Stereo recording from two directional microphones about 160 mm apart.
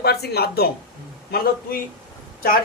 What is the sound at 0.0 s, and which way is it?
Speech, 85° left.